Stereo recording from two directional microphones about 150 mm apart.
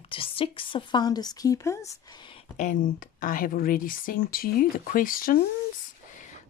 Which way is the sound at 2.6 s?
65° left (ahead or behind).